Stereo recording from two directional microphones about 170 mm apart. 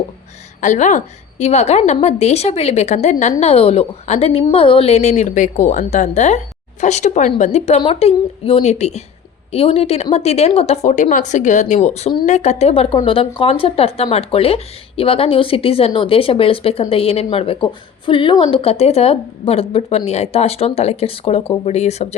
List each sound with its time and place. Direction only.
0.6 s a woman's voice: 45° left (ahead or behind)